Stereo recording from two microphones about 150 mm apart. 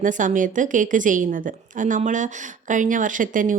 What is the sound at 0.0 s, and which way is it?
A woman's voice, 60° right (ahead or behind).